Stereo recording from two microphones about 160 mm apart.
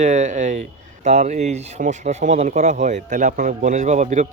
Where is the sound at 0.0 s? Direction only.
50° right (ahead or behind).